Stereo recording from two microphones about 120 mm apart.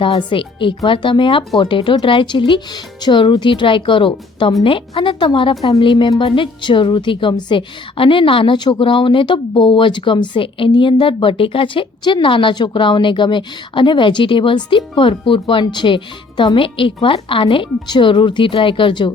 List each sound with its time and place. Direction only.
0.0 s a woman's voice: 45° left (ahead or behind)